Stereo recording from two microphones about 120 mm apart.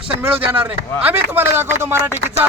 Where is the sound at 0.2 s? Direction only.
15° right (ahead or behind).